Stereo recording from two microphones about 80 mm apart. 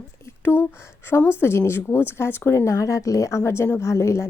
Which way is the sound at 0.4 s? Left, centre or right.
Left.